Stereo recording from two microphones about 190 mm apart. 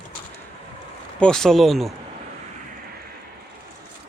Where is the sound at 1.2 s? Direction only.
5° left (ahead or behind).